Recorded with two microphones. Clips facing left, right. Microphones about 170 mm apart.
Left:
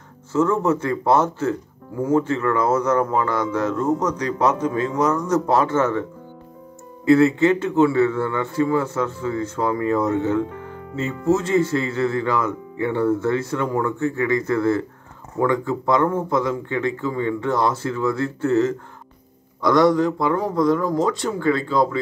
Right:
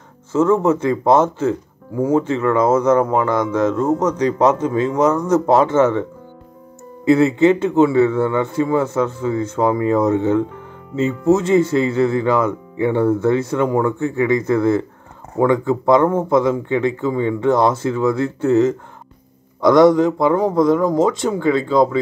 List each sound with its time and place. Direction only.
0.3 s speech: 20° right (ahead or behind)
7.1 s speech: 25° right (ahead or behind)